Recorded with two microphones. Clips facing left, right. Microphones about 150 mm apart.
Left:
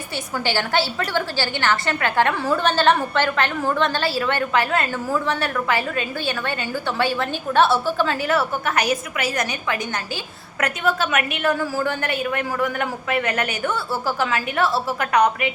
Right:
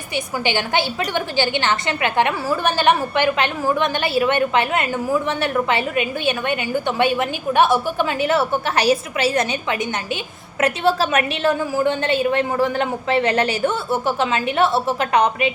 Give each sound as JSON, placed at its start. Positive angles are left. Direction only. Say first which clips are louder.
{"t": 0.4, "sound": "a woman's voice", "louder": "even", "side_deg": -15}